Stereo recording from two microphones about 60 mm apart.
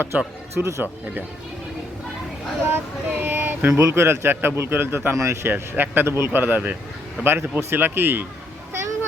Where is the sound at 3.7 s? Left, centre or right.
Right.